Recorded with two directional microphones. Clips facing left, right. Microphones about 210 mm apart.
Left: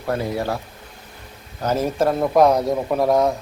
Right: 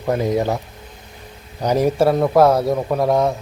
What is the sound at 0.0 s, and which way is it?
Speech, 20° right (ahead or behind).